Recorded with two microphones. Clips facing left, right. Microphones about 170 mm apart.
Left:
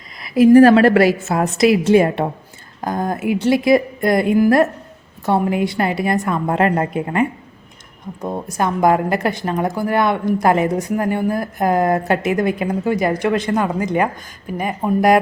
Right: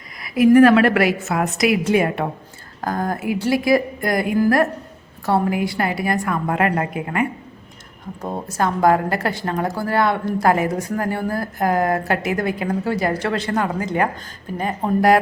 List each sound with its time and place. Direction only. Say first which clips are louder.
0.2 s a woman's voice: left 3 dB; 30° left (ahead or behind)
8.4 s a woman's voice: left 1 dB; 15° left (ahead or behind)